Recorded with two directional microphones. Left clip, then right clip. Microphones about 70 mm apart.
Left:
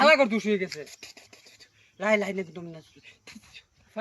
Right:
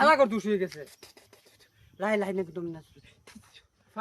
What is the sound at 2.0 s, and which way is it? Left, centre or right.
A man's voice, right.